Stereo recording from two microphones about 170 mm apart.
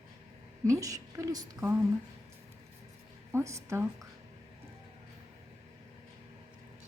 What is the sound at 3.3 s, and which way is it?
Speech, 15° right (ahead or behind).